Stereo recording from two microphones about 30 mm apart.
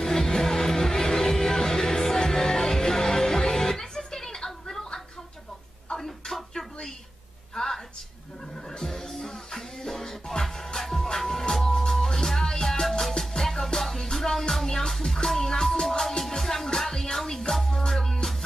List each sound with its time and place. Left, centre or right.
0.0 s music: centre
5.9 s a sound: centre
8.8 s music: centre